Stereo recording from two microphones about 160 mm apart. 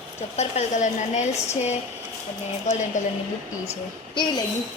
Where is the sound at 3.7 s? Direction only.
30° left (ahead or behind).